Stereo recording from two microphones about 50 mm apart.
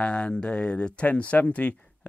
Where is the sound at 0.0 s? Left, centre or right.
Left.